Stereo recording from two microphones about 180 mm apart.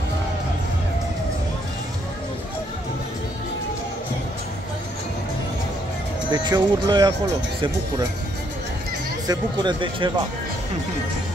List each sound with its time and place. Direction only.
6.3 s speech: 25° right (ahead or behind)
9.3 s speech: 25° right (ahead or behind)